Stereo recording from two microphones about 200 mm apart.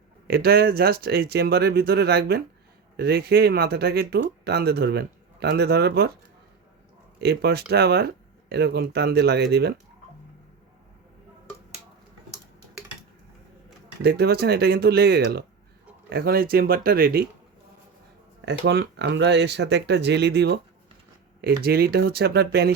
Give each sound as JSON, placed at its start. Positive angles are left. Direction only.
{"t": 0.3, "sound": "speech", "side_deg": -50}
{"t": 7.2, "sound": "speech", "side_deg": -55}
{"t": 14.0, "sound": "speech", "side_deg": -55}
{"t": 18.4, "sound": "speech", "side_deg": -60}
{"t": 21.6, "sound": "speech", "side_deg": -50}